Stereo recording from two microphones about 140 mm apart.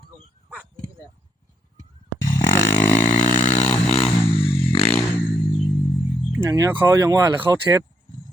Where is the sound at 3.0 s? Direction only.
60° left (ahead or behind).